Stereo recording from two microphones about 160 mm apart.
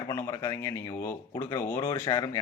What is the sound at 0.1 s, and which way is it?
Speech, 15° left (ahead or behind).